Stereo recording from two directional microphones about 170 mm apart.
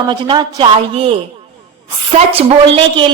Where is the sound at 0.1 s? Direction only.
25° right (ahead or behind).